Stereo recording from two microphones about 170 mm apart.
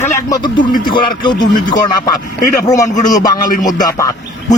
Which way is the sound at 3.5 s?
50° left (ahead or behind).